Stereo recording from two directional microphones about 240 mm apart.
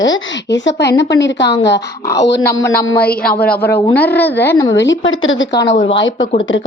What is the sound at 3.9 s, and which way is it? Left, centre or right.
Speech, centre.